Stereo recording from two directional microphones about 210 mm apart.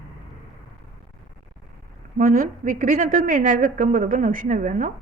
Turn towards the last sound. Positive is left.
turn(degrees=-40)  # may be behind; listen again after turning